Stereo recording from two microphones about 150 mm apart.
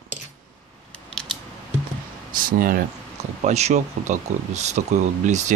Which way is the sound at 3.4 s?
50° right (ahead or behind).